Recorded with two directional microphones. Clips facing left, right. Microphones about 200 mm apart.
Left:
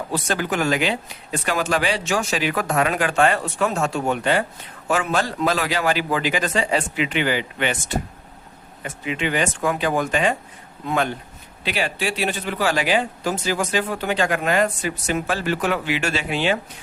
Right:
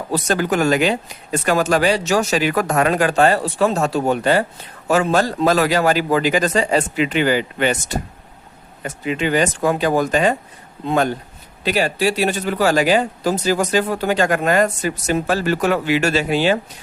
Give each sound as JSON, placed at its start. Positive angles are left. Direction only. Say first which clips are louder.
{"t": 0.1, "sound": "speech", "louder": "right 6 dB", "side_deg": -40}